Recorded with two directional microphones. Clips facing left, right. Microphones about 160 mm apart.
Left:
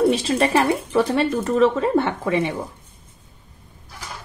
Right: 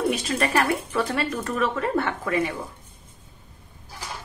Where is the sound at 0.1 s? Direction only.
30° left (ahead or behind).